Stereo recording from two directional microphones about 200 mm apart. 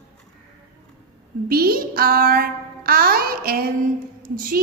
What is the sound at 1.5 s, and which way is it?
Child singing, 50° right (ahead or behind).